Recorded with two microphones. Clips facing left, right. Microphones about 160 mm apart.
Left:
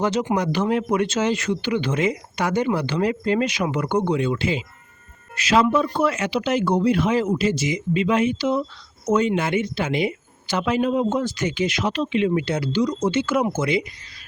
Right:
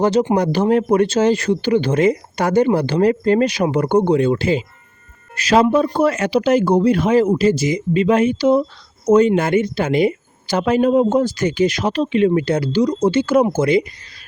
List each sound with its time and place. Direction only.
0.0 s speech: 35° right (ahead or behind)